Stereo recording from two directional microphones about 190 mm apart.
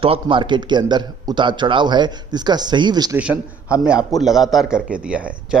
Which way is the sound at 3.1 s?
10° right (ahead or behind).